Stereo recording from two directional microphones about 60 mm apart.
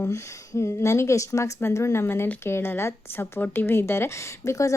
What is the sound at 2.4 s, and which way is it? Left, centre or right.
Speech, left.